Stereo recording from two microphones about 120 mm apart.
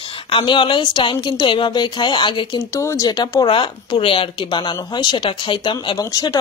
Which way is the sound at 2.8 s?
25° left (ahead or behind).